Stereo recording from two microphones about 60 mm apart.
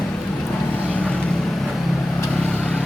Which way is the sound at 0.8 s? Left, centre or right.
Left.